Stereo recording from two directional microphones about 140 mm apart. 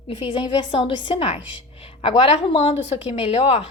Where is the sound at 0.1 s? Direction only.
40° left (ahead or behind).